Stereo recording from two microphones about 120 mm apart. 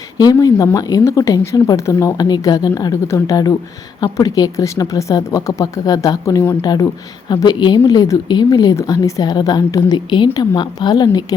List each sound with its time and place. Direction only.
0.2 s speech: 30° left (ahead or behind)